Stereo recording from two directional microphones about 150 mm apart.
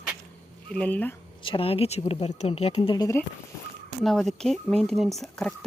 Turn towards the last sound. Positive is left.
turn(degrees=5)  # may be behind; listen again after turning